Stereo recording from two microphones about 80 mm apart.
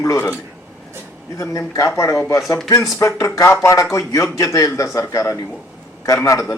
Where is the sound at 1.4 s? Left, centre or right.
Left.